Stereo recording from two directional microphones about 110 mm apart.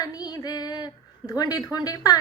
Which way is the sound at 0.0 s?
35° left (ahead or behind).